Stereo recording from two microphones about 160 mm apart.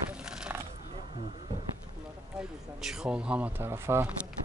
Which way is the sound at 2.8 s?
5° right (ahead or behind).